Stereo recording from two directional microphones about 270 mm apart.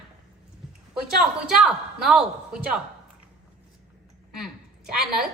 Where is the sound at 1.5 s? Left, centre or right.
Centre.